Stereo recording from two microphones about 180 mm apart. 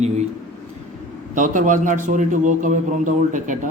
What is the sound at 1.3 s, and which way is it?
Speech, 45° right (ahead or behind).